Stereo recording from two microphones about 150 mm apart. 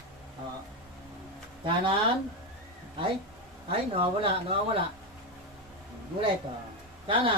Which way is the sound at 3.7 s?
35° right (ahead or behind).